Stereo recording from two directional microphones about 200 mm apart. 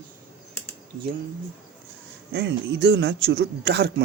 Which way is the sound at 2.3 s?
60° right (ahead or behind).